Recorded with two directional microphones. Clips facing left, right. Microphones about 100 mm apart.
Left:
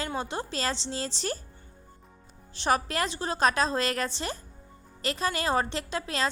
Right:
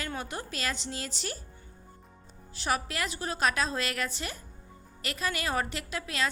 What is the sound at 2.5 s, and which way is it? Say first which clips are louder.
A woman's voice: left 5 dB; 35° left (ahead or behind).